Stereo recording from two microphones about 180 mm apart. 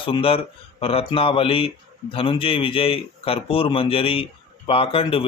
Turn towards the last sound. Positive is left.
turn(degrees=30)  # may be behind; listen again after turning